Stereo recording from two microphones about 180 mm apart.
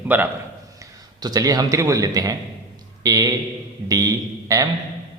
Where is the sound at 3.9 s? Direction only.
20° right (ahead or behind).